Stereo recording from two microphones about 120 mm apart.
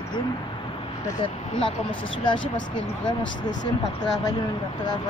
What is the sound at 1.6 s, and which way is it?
Speech, 45° left (ahead or behind).